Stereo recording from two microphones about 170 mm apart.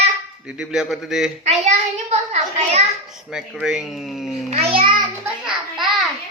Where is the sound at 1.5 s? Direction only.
40° right (ahead or behind).